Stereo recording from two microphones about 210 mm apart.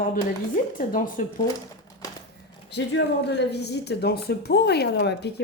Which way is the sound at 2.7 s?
55° left (ahead or behind).